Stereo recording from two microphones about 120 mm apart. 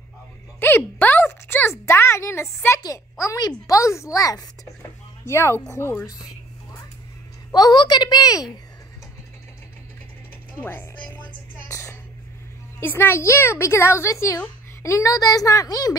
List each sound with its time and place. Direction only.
0.6 s a sound: 15° left (ahead or behind)
2.8 s a woman's voice: 25° left (ahead or behind)
7.5 s a woman's voice: 35° left (ahead or behind)
10.6 s music: 15° left (ahead or behind)
12.8 s a woman's voice: 20° left (ahead or behind)